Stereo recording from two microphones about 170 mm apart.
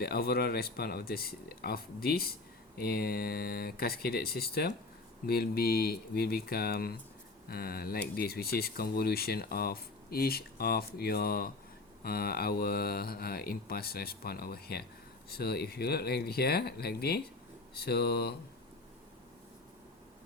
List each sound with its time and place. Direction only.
0.0 s speech: 65° left (ahead or behind)